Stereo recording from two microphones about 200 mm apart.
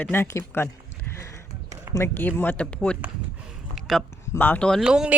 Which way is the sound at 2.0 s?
10° left (ahead or behind).